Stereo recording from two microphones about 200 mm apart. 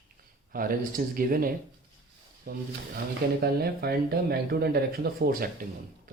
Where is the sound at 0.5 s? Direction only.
45° right (ahead or behind).